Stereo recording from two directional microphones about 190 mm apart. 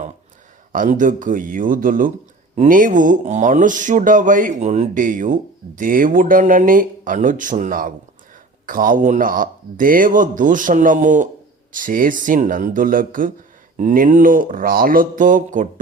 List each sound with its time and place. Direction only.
0.7 s speech: 45° right (ahead or behind)